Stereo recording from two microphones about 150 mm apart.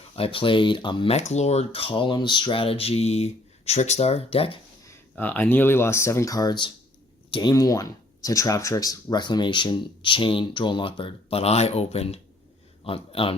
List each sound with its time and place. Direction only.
0.2 s speech: 35° left (ahead or behind)
5.1 s speech: 10° left (ahead or behind); by 7.5 s 35° left (ahead or behind)
7.5 s speech: 25° left (ahead or behind); by 13.3 s 40° left (ahead or behind)